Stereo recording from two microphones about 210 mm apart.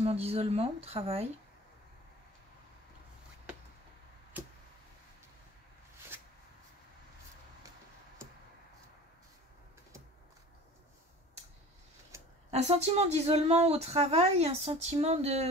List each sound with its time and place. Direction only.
0.0 s speech: 30° right (ahead or behind)
4.4 s a sound: 10° right (ahead or behind)
12.4 s speech: 30° right (ahead or behind)